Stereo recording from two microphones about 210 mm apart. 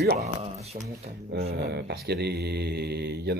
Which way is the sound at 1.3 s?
50° right (ahead or behind).